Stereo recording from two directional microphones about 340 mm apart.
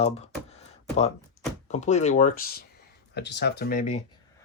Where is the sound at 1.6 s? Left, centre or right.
Centre.